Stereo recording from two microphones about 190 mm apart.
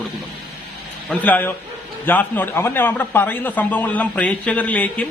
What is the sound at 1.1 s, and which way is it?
A man's voice, 10° left (ahead or behind).